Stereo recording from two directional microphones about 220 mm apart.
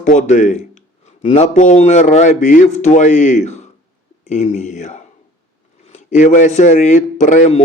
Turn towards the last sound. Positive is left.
turn(degrees=35)  # may be behind; listen again after turning